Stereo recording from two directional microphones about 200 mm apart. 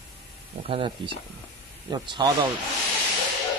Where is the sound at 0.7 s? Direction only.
25° right (ahead or behind).